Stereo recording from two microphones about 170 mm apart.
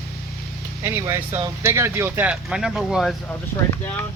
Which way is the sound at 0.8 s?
15° right (ahead or behind).